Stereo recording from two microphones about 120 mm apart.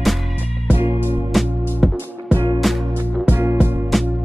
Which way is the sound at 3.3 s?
15° right (ahead or behind).